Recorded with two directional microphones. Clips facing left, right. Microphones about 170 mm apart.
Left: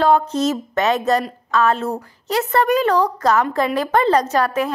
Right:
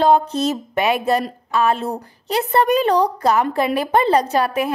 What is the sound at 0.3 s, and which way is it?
A woman's voice, 15° right (ahead or behind).